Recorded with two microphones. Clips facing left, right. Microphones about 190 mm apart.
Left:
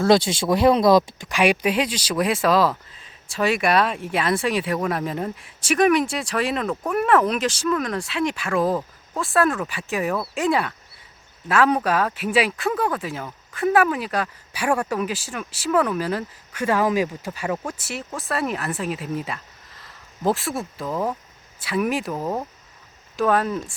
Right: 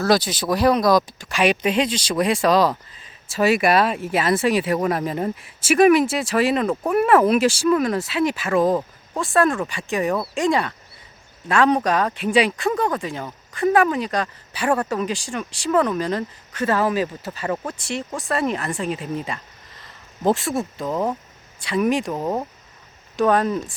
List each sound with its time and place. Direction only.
0.0 s speech: 25° left (ahead or behind)
1.3 s speech: 10° left (ahead or behind)
22.1 s speech: 10° right (ahead or behind)
23.1 s speech: 5° left (ahead or behind)